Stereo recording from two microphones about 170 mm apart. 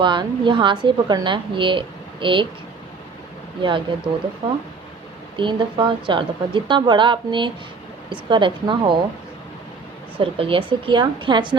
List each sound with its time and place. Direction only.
0.0 s a woman's voice: 25° right (ahead or behind)
3.6 s a woman's voice: 30° right (ahead or behind)
5.4 s a woman's voice: 30° right (ahead or behind)
10.2 s a woman's voice: 30° right (ahead or behind)